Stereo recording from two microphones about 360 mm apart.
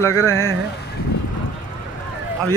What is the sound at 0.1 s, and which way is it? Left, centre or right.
Speech, right.